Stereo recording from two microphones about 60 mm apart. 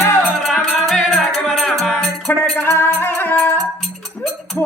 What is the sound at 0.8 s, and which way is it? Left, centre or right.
Music, centre.